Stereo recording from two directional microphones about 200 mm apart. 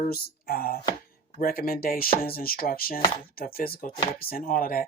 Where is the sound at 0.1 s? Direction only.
50° left (ahead or behind).